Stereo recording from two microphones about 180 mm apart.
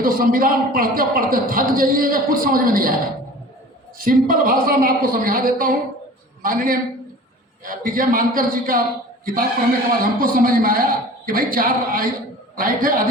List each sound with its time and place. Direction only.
0.0 s a man's voice: 50° right (ahead or behind)
3.9 s a man's voice: 50° right (ahead or behind)